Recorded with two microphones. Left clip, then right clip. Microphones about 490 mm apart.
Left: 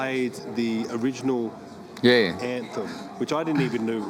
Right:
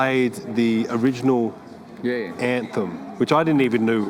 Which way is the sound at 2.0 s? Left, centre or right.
Left.